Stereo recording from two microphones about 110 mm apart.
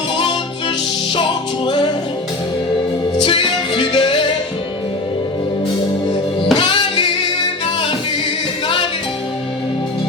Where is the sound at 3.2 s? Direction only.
50° left (ahead or behind).